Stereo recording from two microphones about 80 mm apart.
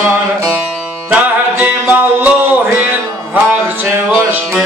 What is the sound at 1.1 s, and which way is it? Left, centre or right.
Music, centre.